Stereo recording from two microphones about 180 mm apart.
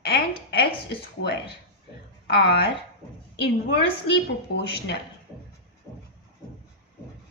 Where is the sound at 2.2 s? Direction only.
75° left (ahead or behind).